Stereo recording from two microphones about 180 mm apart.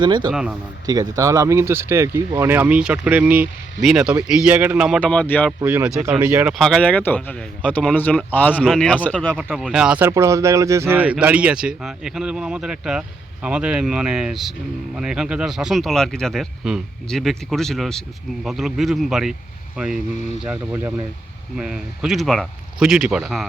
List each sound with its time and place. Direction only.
0.0 s speech: 25° right (ahead or behind); by 4.9 s 5° right (ahead or behind)
4.9 s speech: 5° left (ahead or behind)
5.5 s speech: 10° right (ahead or behind)
6.5 s speech: centre (ahead or behind)
9.4 s speech: 5° right (ahead or behind)